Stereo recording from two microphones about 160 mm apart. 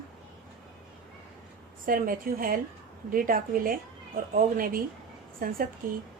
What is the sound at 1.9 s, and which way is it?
Speech, 60° right (ahead or behind).